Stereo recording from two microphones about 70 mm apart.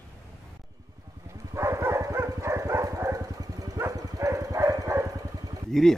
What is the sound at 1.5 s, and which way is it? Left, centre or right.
Dog, right.